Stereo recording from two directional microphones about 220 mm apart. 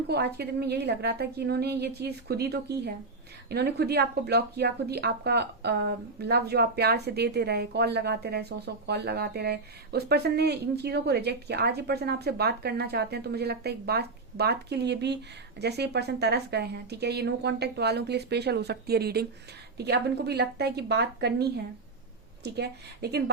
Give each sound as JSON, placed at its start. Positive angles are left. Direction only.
{"t": 0.1, "sound": "speech", "side_deg": -45}